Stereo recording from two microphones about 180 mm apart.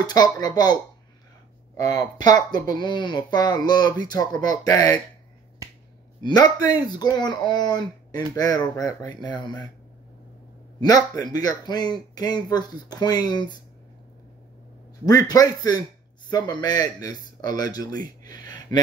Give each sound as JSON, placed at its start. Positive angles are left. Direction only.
{"t": 0.0, "sound": "speech", "side_deg": 20}
{"t": 1.8, "sound": "speech", "side_deg": 20}
{"t": 5.6, "sound": "finger snapping", "side_deg": -20}
{"t": 6.2, "sound": "speech", "side_deg": 20}
{"t": 10.8, "sound": "speech", "side_deg": 20}
{"t": 15.0, "sound": "speech", "side_deg": 20}
{"t": 18.2, "sound": "a sound", "side_deg": 20}